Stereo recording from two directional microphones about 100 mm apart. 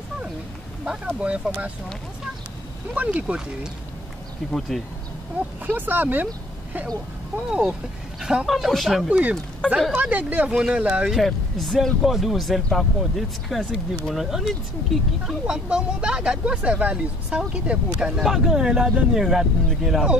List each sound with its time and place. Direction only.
0.8 s speech: 10° right (ahead or behind)
2.9 s speech: 15° right (ahead or behind)
4.5 s speech: 5° left (ahead or behind)
5.7 s speech: 20° right (ahead or behind)
7.3 s speech: 5° right (ahead or behind)
9.9 s speech: 15° right (ahead or behind)
11.1 s speech: centre (ahead or behind)